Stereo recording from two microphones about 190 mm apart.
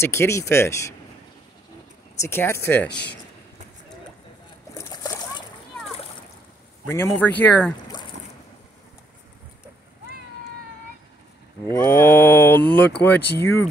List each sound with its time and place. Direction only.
0.0 s speech: 15° left (ahead or behind)
2.1 s speech: 15° left (ahead or behind)
4.7 s splash: 20° left (ahead or behind)
6.9 s speech: 15° left (ahead or behind)
11.8 s speech: 15° left (ahead or behind)